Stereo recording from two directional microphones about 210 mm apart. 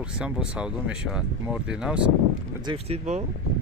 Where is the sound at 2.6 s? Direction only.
30° right (ahead or behind).